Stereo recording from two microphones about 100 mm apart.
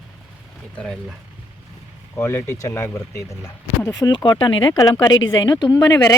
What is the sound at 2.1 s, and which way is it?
Speech, 20° left (ahead or behind).